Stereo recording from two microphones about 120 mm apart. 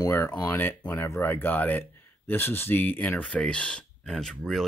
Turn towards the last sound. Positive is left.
turn(degrees=0)  # may be behind; listen again after turning